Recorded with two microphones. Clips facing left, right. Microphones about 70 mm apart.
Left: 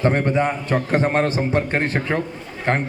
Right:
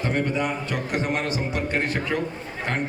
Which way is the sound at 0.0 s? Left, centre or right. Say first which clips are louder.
Left 6 dB; left.